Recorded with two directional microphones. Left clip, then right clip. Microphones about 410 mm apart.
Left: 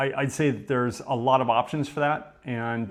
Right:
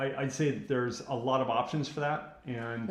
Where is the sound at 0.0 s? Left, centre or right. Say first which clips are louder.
Left 7 dB; left.